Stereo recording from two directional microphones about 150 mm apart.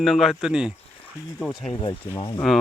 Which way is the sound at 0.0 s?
Centre (ahead or behind).